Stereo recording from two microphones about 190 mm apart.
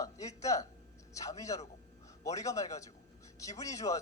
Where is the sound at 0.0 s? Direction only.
15° left (ahead or behind).